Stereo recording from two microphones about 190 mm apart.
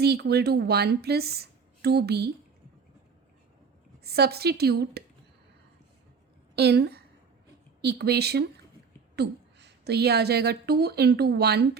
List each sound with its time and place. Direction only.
0.0 s a woman's voice: 60° right (ahead or behind)
4.0 s a woman's voice: 55° right (ahead or behind)
6.6 s a woman's voice: 60° right (ahead or behind)